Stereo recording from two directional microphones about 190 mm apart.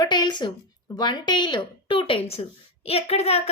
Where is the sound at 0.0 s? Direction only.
25° left (ahead or behind).